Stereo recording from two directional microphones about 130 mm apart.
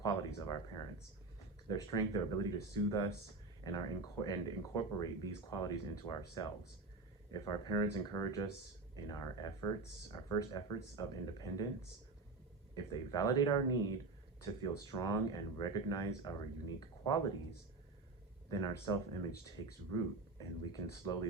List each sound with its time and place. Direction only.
0.0 s speech: 30° left (ahead or behind)
18.5 s speech: 35° left (ahead or behind)